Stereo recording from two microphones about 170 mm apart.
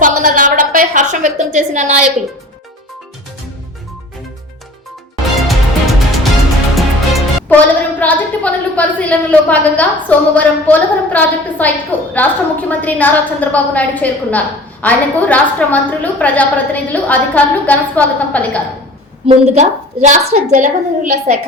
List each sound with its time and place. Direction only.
0.0 s a sound: 55° right (ahead or behind)
5.5 s music: centre (ahead or behind)
8.7 s a woman's voice: 10° left (ahead or behind)
19.3 s a woman's voice: 40° right (ahead or behind)